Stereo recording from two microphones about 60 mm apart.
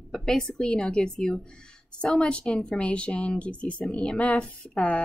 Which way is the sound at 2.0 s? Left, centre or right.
Centre.